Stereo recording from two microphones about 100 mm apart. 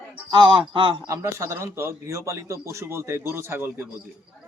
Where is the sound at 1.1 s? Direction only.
30° right (ahead or behind).